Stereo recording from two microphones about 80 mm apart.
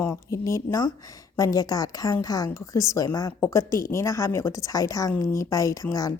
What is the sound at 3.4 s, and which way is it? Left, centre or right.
A woman's voice, left.